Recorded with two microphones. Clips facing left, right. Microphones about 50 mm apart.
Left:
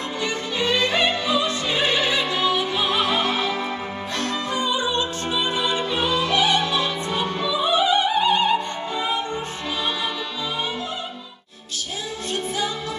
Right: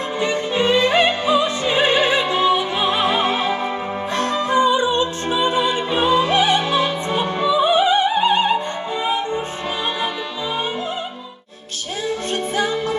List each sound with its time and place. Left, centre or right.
0.2 s music: right